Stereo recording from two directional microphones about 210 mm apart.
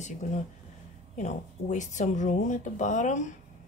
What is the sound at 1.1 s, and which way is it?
A woman's voice, 35° left (ahead or behind).